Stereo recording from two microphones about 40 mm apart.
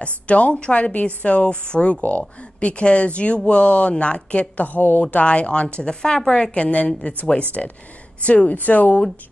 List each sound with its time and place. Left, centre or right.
0.0 s a woman's voice: left
2.7 s a woman's voice: left
4.6 s a woman's voice: left
5.1 s a woman's voice: left
7.6 s speech: centre
8.2 s a woman's voice: left